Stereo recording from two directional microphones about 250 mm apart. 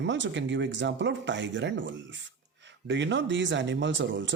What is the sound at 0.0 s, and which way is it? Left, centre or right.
Speech, right.